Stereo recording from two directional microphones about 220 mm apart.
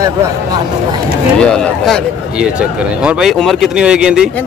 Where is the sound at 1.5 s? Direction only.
Centre (ahead or behind).